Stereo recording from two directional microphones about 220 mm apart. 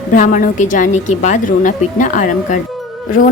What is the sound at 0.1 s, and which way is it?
A woman's voice, 35° left (ahead or behind).